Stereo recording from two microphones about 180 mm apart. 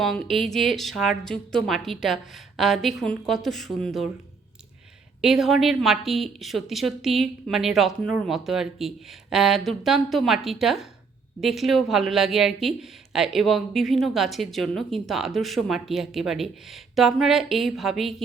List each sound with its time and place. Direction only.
0.0 s a woman's voice: centre (ahead or behind)
5.2 s a woman's voice: centre (ahead or behind)